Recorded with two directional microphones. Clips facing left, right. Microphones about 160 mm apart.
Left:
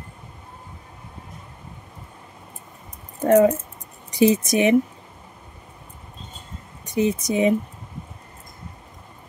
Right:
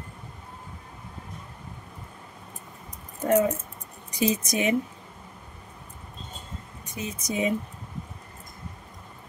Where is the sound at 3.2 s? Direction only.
65° left (ahead or behind).